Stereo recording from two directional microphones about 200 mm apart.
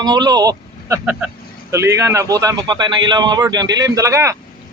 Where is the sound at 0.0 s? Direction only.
20° right (ahead or behind).